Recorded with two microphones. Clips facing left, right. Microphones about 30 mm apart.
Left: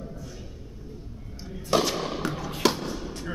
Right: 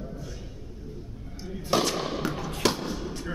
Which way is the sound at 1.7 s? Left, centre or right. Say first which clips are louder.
Left 1 dB; centre.